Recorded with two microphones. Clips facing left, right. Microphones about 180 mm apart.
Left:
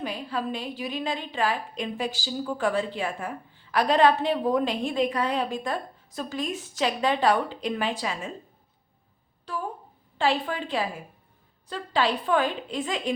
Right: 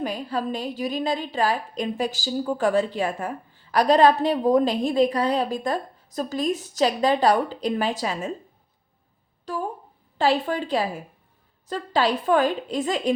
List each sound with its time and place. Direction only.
0.0 s a woman's voice: 40° right (ahead or behind)
9.5 s a woman's voice: 40° right (ahead or behind)